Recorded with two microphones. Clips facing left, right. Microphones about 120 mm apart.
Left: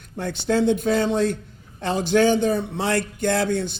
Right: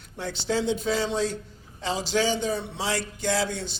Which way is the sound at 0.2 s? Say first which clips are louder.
Left 6 dB; 55° left (ahead or behind).